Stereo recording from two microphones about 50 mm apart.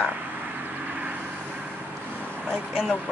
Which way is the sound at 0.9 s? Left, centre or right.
Right.